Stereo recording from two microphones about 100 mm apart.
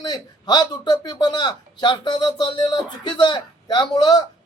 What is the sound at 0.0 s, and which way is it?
A man's voice, 45° left (ahead or behind).